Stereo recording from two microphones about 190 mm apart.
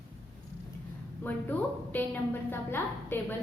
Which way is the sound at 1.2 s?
10° left (ahead or behind).